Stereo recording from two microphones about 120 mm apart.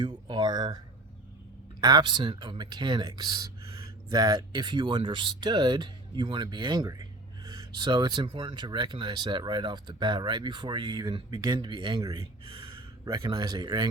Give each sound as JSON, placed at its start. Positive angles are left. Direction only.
{"t": 0.0, "sound": "speech", "side_deg": -35}
{"t": 1.8, "sound": "speech", "side_deg": -35}
{"t": 12.5, "sound": "a sound", "side_deg": -45}
{"t": 13.2, "sound": "speech", "side_deg": -40}